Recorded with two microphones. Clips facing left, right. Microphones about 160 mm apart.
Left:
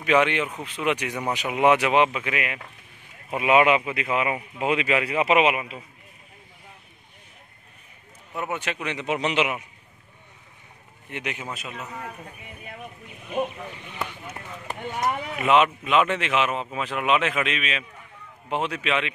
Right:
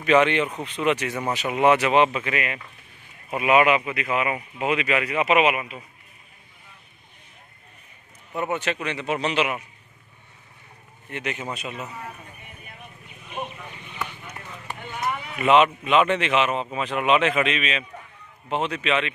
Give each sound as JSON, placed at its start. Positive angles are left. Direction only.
{"t": 0.0, "sound": "speech", "side_deg": 10}
{"t": 3.3, "sound": "speech", "side_deg": 25}
{"t": 8.4, "sound": "speech", "side_deg": 10}
{"t": 11.1, "sound": "speech", "side_deg": 15}
{"t": 11.5, "sound": "speech", "side_deg": 0}
{"t": 14.7, "sound": "a sound", "side_deg": 40}
{"t": 15.3, "sound": "speech", "side_deg": 5}